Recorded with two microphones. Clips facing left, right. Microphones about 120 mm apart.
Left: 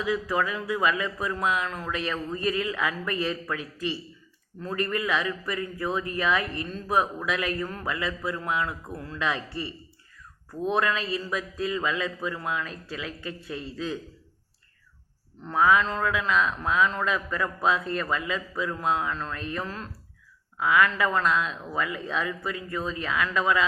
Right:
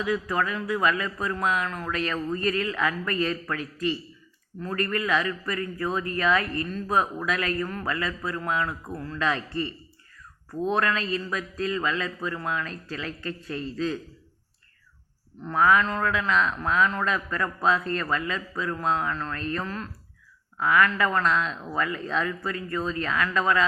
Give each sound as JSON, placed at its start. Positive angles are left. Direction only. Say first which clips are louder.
{"t": 0.3, "sound": "a man's voice", "louder": "even", "side_deg": 20}
{"t": 15.4, "sound": "a man's voice", "louder": "right 1 dB", "side_deg": 20}